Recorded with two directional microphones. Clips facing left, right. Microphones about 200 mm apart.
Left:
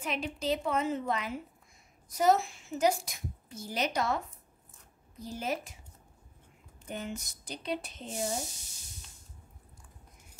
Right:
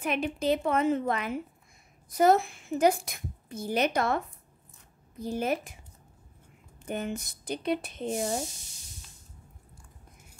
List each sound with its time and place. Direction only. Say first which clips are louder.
0.0 s a woman's voice: right 5 dB; 55° right (ahead or behind)
5.2 s a woman's voice: right 6 dB; 55° right (ahead or behind)
6.9 s a woman's voice: right 6 dB; 55° right (ahead or behind)